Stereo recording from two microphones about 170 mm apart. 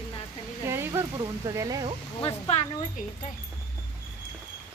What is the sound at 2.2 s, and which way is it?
Speech, 40° left (ahead or behind).